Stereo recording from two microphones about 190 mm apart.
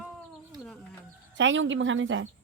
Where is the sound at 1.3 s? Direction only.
80° right.